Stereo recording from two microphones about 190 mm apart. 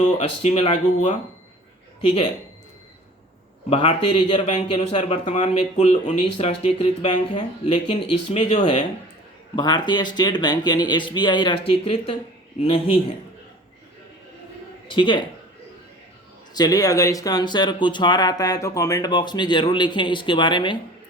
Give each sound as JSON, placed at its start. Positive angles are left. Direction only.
{"t": 0.2, "sound": "speech", "side_deg": 30}
{"t": 3.7, "sound": "speech", "side_deg": 30}
{"t": 14.8, "sound": "speech", "side_deg": 25}
{"t": 16.6, "sound": "speech", "side_deg": 20}